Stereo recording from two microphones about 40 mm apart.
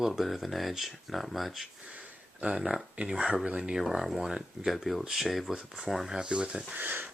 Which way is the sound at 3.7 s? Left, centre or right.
Centre.